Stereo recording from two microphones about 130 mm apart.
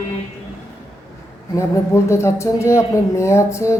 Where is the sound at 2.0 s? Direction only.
20° left (ahead or behind).